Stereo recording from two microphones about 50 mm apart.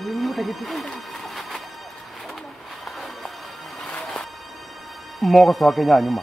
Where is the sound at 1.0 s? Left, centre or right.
Centre.